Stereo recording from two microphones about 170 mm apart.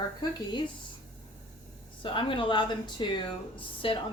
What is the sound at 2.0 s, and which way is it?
A woman's voice, 30° left (ahead or behind).